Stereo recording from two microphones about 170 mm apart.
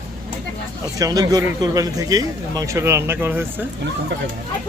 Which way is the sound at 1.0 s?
20° right (ahead or behind).